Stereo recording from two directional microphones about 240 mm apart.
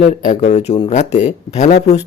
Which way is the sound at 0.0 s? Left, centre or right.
Left.